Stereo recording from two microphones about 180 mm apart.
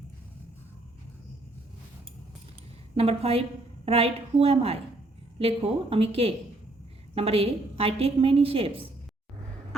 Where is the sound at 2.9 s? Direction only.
35° right (ahead or behind).